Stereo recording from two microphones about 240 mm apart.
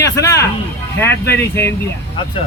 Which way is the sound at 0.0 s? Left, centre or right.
Centre.